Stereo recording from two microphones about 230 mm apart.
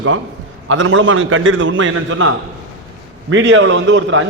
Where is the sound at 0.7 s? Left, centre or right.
Right.